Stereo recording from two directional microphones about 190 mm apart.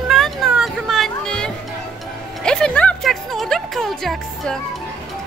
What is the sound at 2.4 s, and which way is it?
Music, 5° left (ahead or behind).